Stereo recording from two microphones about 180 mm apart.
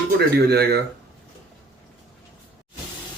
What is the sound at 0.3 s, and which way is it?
Speech, 60° right (ahead or behind).